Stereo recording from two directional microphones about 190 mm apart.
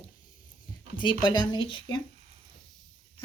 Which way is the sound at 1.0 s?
25° left (ahead or behind).